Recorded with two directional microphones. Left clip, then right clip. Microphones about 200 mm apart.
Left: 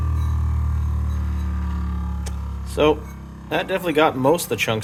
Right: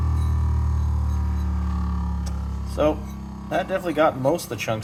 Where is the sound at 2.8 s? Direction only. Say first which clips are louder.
Left 4 dB; 50° left (ahead or behind).